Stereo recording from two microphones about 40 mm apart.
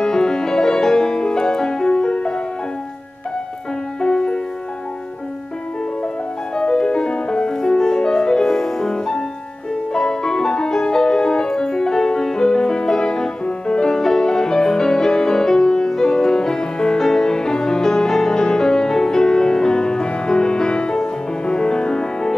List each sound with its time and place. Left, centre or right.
0.0 s music: centre
4.0 s music: centre
6.5 s music: left